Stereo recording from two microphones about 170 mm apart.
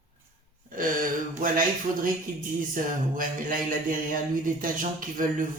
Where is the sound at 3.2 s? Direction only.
55° right (ahead or behind).